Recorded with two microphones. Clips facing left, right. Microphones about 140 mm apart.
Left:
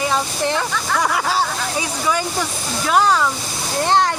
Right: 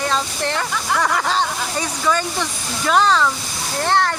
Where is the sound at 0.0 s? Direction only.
15° left (ahead or behind).